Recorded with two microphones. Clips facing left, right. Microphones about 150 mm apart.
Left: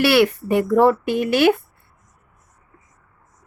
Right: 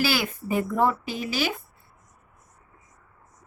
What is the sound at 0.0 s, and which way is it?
Speech, 70° left (ahead or behind).